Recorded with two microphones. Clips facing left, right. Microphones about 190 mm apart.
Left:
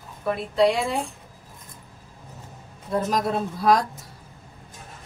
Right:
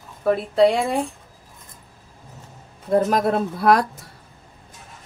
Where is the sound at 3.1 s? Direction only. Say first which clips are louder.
Right 4 dB; 60° right (ahead or behind).